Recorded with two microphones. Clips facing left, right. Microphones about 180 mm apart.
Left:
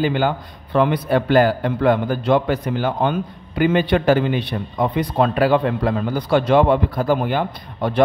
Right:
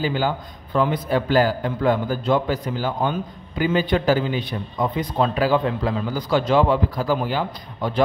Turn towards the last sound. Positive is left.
turn(degrees=60)  # may be behind; listen again after turning